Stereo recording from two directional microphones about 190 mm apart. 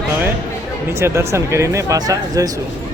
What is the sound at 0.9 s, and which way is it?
Speech, 15° right (ahead or behind).